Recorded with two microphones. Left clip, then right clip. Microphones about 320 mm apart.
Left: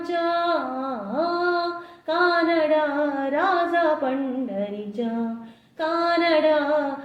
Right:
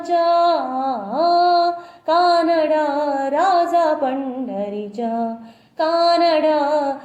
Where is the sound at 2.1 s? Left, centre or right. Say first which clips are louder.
Right 5 dB; right.